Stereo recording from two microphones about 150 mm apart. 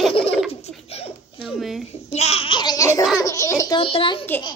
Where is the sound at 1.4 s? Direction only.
Centre (ahead or behind).